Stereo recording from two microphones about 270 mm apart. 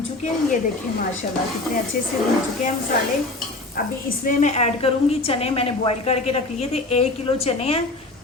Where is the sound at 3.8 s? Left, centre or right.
Left.